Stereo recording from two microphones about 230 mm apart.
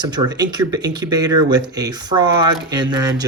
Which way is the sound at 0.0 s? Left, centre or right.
Centre.